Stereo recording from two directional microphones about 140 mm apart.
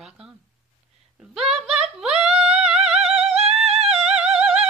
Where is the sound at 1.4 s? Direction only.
50° right (ahead or behind).